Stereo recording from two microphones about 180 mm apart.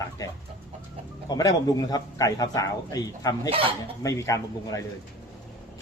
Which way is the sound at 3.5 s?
30° right (ahead or behind).